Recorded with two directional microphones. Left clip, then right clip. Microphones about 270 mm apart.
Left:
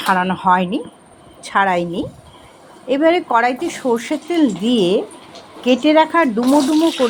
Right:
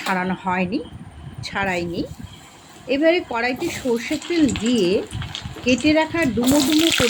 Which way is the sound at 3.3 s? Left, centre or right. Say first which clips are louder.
Left 7 dB; centre.